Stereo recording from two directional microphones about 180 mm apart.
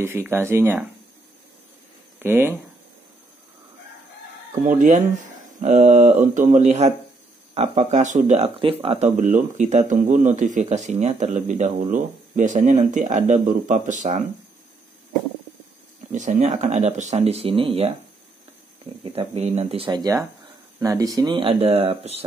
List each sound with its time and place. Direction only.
0.0 s speech: 10° right (ahead or behind)
2.1 s speech: 10° right (ahead or behind)
4.6 s speech: 45° right (ahead or behind)
8.5 s speech: 30° right (ahead or behind)
9.1 s speech: 45° right (ahead or behind)
16.1 s speech: 40° right (ahead or behind)
19.0 s speech: 35° right (ahead or behind)